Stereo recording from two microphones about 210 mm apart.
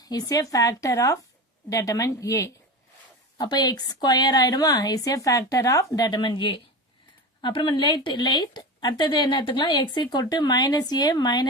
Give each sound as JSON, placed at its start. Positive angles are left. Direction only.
{"t": 0.0, "sound": "speech", "side_deg": 20}